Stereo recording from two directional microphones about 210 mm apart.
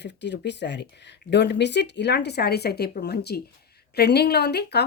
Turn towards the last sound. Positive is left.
turn(degrees=50)  # may be behind; listen again after turning